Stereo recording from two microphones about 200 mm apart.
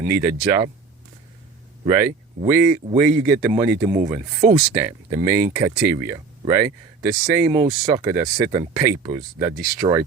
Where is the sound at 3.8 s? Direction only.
30° right (ahead or behind).